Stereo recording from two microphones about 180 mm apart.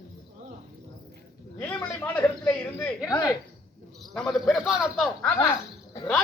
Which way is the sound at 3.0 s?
20° left (ahead or behind).